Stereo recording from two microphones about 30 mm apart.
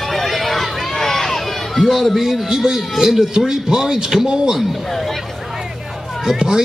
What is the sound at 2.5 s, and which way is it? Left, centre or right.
Speech, right.